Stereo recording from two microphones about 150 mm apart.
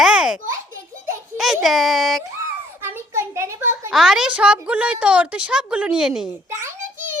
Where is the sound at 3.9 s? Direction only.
Centre (ahead or behind).